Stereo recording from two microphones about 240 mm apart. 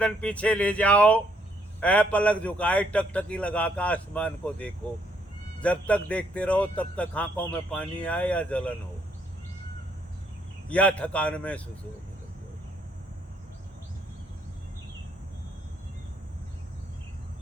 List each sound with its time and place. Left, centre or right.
0.0 s speech: centre
10.7 s speech: centre